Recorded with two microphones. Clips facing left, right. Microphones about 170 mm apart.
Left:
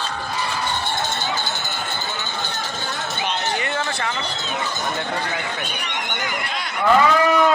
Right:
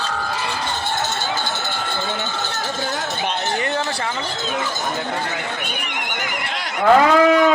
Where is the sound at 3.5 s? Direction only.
40° right (ahead or behind).